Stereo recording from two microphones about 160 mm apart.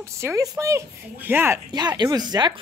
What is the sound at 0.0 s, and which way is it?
Speech, 15° right (ahead or behind).